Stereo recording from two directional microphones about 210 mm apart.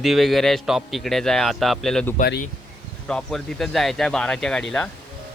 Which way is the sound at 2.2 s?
50° left (ahead or behind).